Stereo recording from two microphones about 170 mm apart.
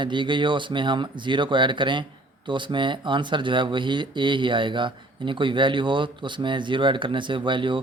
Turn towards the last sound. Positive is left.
turn(degrees=-30)  # may be behind; listen again after turning